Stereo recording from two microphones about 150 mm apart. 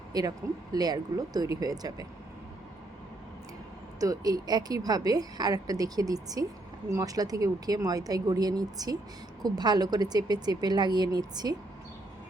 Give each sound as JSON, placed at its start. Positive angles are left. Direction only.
{"t": 0.1, "sound": "a woman's voice", "side_deg": -25}
{"t": 4.0, "sound": "a woman's voice", "side_deg": -25}